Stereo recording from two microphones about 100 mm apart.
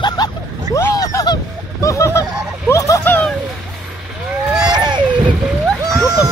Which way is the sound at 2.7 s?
30° left (ahead or behind).